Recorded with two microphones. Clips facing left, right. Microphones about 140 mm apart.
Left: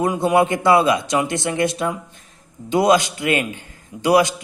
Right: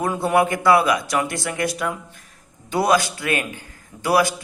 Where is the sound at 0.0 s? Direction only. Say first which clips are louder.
Left 2 dB; 20° left (ahead or behind).